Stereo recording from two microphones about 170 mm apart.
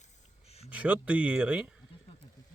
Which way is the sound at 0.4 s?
40° left (ahead or behind).